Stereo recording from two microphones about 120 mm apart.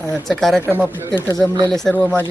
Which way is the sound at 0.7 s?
15° right (ahead or behind).